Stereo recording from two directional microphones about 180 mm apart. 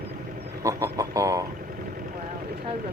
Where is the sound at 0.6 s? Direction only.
15° right (ahead or behind).